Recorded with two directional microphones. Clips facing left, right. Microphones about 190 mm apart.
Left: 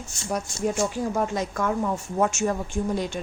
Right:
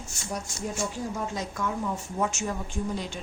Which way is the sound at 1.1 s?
60° left (ahead or behind).